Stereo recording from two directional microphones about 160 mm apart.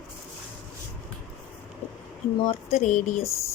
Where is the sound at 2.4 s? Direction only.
45° left (ahead or behind).